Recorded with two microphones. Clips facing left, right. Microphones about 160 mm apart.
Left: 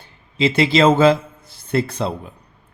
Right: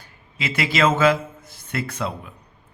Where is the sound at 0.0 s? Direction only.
30° left (ahead or behind).